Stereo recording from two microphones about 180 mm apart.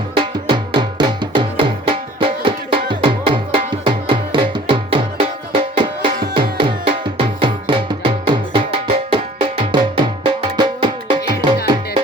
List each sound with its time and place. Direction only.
0.2 s music: 25° right (ahead or behind)